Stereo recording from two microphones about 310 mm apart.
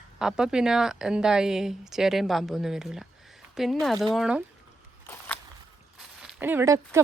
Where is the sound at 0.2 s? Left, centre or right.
Centre.